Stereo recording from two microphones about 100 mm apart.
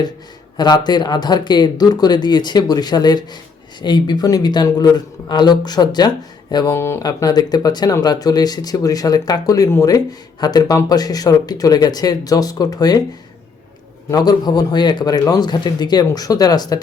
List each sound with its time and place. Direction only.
0.5 s speech: 45° left (ahead or behind)
6.7 s speech: 25° left (ahead or behind)
7.0 s speech: 40° left (ahead or behind)
14.1 s speech: 40° left (ahead or behind)